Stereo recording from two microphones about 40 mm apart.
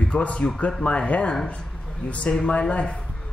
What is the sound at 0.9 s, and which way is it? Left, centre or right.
Speech, left.